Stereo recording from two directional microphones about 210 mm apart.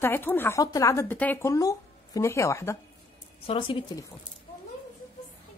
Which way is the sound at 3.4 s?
25° left (ahead or behind).